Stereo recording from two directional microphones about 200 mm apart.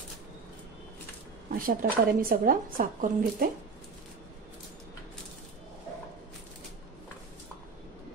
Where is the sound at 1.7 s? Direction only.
45° right (ahead or behind).